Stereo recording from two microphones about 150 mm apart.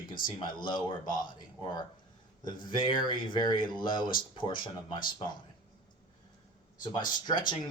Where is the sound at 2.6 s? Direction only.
35° left (ahead or behind).